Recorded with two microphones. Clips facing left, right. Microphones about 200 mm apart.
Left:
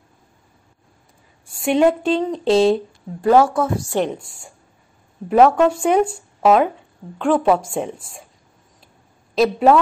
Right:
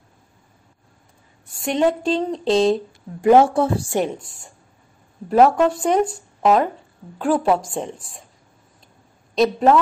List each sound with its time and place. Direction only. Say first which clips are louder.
1.6 s speech: left 3 dB; 5° left (ahead or behind)
3.2 s a woman's voice: right 1 dB; 20° right (ahead or behind)
5.3 s speech: left 1 dB; centre (ahead or behind)
9.3 s a woman's voice: left 1 dB; 5° left (ahead or behind)